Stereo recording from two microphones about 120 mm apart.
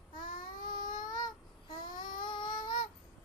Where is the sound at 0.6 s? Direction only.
90° left.